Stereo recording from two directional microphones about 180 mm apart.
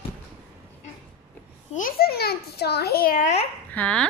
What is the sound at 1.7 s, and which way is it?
A child's voice, 50° left (ahead or behind).